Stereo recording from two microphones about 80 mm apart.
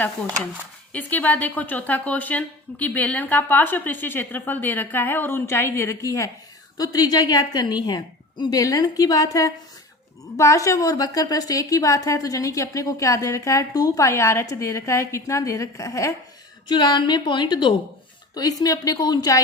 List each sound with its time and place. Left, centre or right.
0.9 s a woman's voice: left
10.9 s a woman's voice: left
16.6 s a woman's voice: left
18.3 s a woman's voice: left